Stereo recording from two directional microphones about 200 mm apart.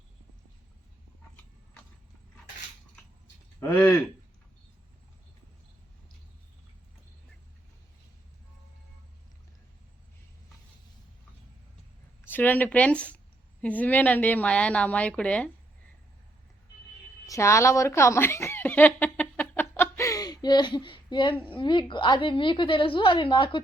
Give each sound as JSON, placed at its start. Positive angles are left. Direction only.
{"t": 3.6, "sound": "a woman's voice", "side_deg": 10}
{"t": 12.2, "sound": "a woman's voice", "side_deg": 10}
{"t": 17.2, "sound": "a woman's voice", "side_deg": 15}